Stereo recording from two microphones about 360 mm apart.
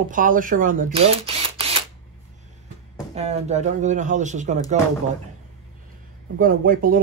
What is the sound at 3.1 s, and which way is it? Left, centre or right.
Speech, centre.